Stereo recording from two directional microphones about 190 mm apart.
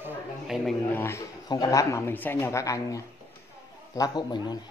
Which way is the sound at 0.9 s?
15° left (ahead or behind).